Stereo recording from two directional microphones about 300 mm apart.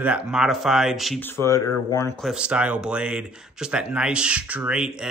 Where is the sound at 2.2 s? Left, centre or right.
Centre.